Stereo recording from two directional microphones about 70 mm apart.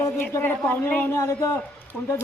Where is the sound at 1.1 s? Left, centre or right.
Left.